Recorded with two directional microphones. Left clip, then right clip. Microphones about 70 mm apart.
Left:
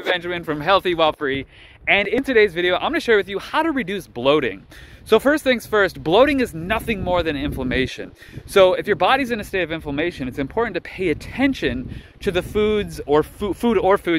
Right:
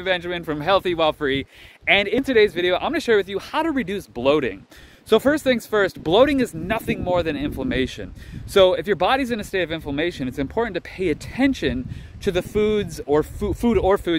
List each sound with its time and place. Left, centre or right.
0.1 s speech: right
2.0 s speech: right
13.5 s speech: right
13.8 s speech: right